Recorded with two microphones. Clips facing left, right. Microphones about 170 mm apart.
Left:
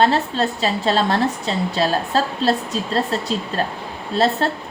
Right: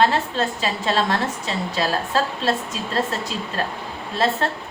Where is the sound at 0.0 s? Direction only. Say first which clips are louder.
Left 2 dB; 35° left (ahead or behind).